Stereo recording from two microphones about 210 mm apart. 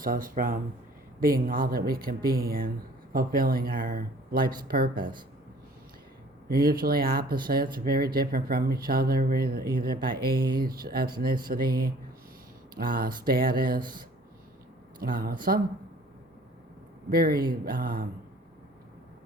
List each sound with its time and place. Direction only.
0.0 s speech: 40° right (ahead or behind)
6.5 s speech: 45° right (ahead or behind)
15.0 s speech: 45° right (ahead or behind)
17.1 s speech: 45° right (ahead or behind)